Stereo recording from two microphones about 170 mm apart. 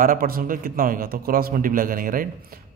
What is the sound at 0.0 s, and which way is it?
Speech, 55° right (ahead or behind).